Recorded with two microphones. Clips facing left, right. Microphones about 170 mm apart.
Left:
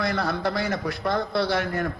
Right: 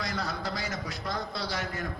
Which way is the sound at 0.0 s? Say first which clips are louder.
Left 8 dB; 60° left (ahead or behind).